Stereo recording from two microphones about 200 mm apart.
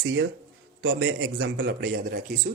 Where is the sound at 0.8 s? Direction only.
80° right.